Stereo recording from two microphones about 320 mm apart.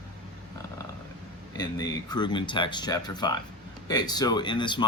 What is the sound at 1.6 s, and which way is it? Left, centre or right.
Speech, centre.